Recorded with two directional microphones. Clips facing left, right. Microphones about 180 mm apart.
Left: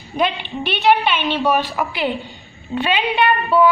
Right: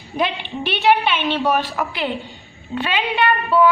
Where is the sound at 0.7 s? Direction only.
Centre (ahead or behind).